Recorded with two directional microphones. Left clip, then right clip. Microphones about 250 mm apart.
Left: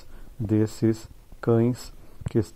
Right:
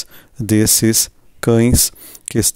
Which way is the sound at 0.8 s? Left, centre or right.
Right.